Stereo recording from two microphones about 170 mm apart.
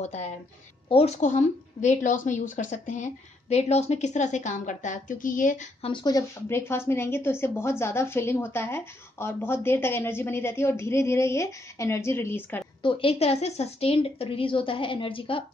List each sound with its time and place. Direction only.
0.0 s a woman's voice: 40° left (ahead or behind)
5.8 s speech: 30° left (ahead or behind); by 12.6 s 15° left (ahead or behind)
12.8 s a woman's voice: 30° left (ahead or behind)